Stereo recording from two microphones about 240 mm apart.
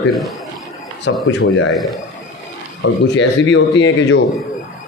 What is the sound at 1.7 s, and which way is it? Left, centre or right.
Speech, centre.